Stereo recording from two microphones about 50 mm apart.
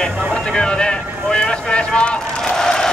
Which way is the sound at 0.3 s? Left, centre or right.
Centre.